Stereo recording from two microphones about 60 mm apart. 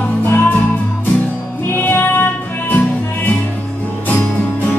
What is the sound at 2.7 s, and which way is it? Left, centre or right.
Music, left.